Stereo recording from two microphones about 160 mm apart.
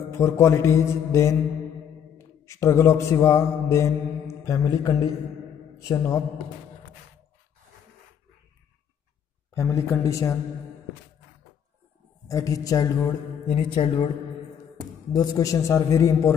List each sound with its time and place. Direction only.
0.1 s a man's voice: 15° left (ahead or behind)
2.1 s mantra: 20° left (ahead or behind)
5.8 s a man's voice: 20° left (ahead or behind)
9.5 s a man's voice: 15° left (ahead or behind)
12.3 s a man's voice: 20° left (ahead or behind)
13.5 s a man's voice: 40° left (ahead or behind)
15.1 s a man's voice: 20° left (ahead or behind)